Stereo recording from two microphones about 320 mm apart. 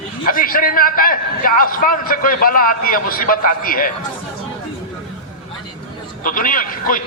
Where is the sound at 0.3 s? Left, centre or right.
Left.